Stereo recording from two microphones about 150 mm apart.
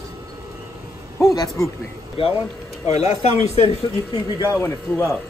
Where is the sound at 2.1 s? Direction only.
35° left (ahead or behind).